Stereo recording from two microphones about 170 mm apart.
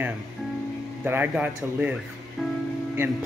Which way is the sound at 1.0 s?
10° right (ahead or behind).